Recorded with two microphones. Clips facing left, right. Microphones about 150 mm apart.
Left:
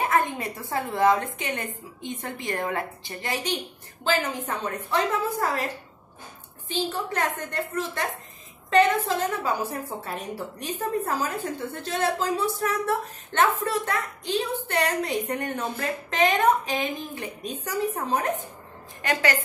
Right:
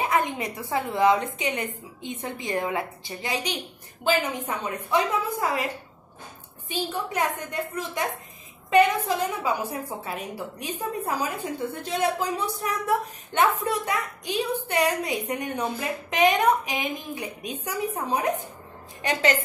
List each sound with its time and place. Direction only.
0.0 s a woman's voice: 20° right (ahead or behind)
6.7 s a woman's voice: 10° right (ahead or behind)
19.0 s a woman's voice: 25° right (ahead or behind)